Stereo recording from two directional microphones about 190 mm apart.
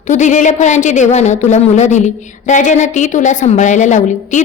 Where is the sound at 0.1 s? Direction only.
40° left (ahead or behind).